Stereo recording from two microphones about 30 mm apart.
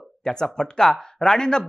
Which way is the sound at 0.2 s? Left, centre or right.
Left.